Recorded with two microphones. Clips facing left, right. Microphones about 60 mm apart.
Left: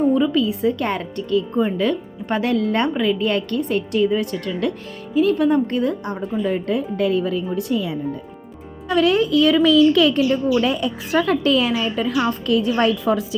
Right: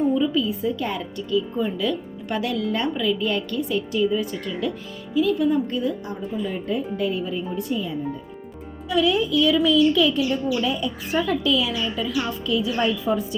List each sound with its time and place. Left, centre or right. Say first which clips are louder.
0.1 s speech: left 4 dB; left
5.1 s speech: left 4 dB; left
8.9 s speech: left 4 dB; left
9.6 s a woman's voice: left 4 dB; left
11.4 s speech: left 4 dB; left